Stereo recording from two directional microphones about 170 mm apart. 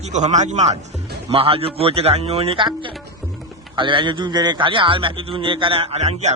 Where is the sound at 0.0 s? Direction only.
45° right (ahead or behind).